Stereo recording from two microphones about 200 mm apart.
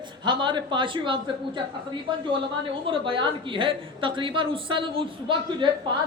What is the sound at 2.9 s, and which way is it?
A woman's voice, 25° right (ahead or behind).